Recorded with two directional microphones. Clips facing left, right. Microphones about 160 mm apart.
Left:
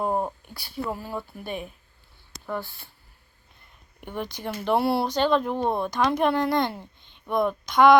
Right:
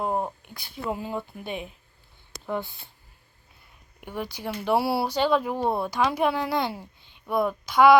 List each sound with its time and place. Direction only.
0.0 s a sound: 5° left (ahead or behind)
0.9 s speech: 15° right (ahead or behind)
4.0 s speech: 10° right (ahead or behind)